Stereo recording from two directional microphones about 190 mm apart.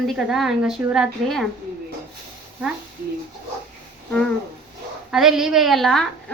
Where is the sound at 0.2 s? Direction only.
5° right (ahead or behind).